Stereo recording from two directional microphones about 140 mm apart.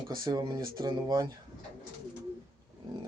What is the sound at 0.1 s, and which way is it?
Speech, 30° right (ahead or behind).